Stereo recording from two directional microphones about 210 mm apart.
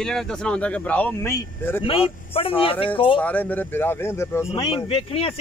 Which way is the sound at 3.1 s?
5° left (ahead or behind).